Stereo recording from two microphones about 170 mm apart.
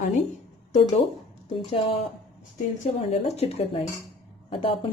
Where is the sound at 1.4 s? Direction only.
35° left (ahead or behind).